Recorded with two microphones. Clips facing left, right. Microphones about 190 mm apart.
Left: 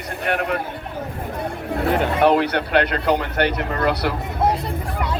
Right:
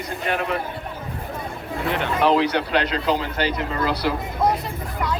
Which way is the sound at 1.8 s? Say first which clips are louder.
Left 5 dB; 40° left (ahead or behind).